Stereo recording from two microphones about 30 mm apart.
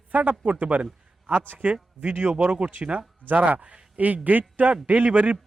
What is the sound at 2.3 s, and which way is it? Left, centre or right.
Speech, right.